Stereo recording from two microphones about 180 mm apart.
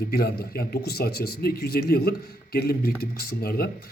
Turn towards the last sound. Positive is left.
turn(degrees=60)  # may be behind; listen again after turning